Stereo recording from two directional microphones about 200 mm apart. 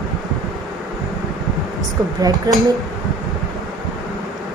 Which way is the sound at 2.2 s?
20° right (ahead or behind).